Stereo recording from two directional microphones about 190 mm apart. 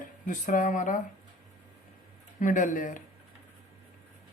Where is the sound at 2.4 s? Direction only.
45° left (ahead or behind).